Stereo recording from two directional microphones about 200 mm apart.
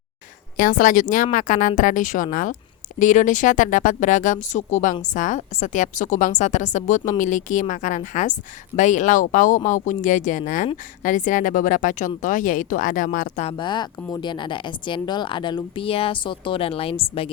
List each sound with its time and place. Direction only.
0.5 s a woman's voice: 40° left (ahead or behind)
13.6 s speech: 20° left (ahead or behind)